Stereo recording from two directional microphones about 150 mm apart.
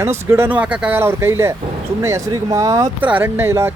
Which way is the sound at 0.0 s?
15° right (ahead or behind).